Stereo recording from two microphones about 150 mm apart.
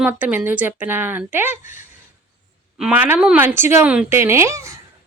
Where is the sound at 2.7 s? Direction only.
10° right (ahead or behind).